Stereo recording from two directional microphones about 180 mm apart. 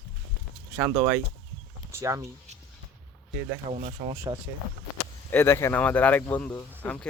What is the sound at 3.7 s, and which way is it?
Speech, 35° right (ahead or behind).